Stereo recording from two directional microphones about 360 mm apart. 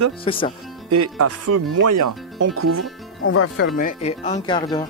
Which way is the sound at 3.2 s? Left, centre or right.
Left.